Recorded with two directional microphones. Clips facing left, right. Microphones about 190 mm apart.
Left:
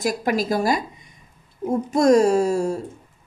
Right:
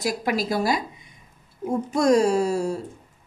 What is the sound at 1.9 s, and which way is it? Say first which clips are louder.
Speech: left 3 dB; 45° left (ahead or behind).